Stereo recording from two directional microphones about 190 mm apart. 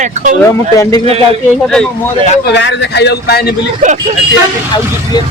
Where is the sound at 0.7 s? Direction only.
15° left (ahead or behind).